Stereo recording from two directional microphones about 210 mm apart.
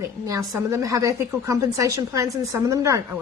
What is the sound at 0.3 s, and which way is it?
A woman's voice, 15° right (ahead or behind).